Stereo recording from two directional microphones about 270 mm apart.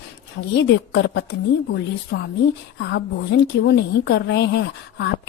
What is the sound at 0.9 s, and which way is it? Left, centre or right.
Speech, left.